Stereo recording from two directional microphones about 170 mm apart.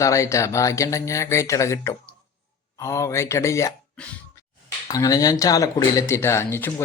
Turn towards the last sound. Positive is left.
turn(degrees=15)  # may be behind; listen again after turning